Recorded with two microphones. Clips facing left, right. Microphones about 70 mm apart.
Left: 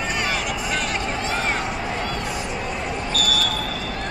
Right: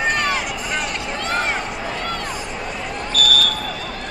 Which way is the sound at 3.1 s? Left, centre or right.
Right.